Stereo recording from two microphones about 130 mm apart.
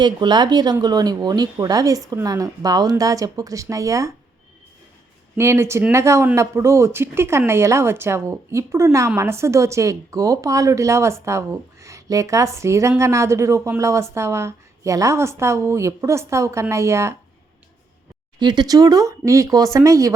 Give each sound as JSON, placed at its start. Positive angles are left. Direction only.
{"t": 0.0, "sound": "speech", "side_deg": -35}
{"t": 5.4, "sound": "speech", "side_deg": -20}
{"t": 18.3, "sound": "speech", "side_deg": -35}